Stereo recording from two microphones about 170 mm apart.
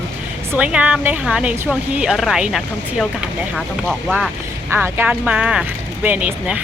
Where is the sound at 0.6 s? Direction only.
10° right (ahead or behind).